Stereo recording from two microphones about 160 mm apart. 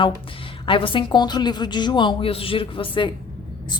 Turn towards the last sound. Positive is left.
turn(degrees=30)  # may be behind; listen again after turning